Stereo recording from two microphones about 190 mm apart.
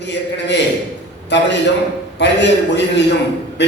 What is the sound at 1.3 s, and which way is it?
A man's voice, 65° left (ahead or behind).